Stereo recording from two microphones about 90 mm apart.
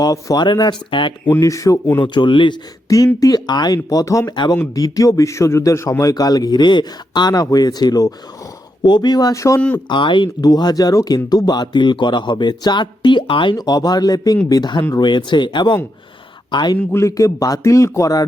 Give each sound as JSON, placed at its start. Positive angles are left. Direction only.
{"t": 0.0, "sound": "speech", "side_deg": 40}
{"t": 0.3, "sound": "speech", "side_deg": 55}
{"t": 1.4, "sound": "speech", "side_deg": 35}
{"t": 2.0, "sound": "speech", "side_deg": 60}
{"t": 3.2, "sound": "speech", "side_deg": 45}
{"t": 9.3, "sound": "speech", "side_deg": 35}
{"t": 9.7, "sound": "speech", "side_deg": 60}
{"t": 10.4, "sound": "speech", "side_deg": 45}
{"t": 16.7, "sound": "speech", "side_deg": 30}